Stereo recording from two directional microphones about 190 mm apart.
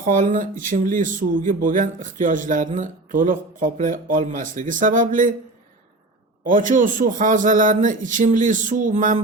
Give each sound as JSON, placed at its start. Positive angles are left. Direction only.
{"t": 0.0, "sound": "speech", "side_deg": -45}
{"t": 6.4, "sound": "speech", "side_deg": -45}